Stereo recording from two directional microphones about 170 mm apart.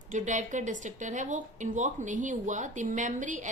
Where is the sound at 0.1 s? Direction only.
45° right (ahead or behind).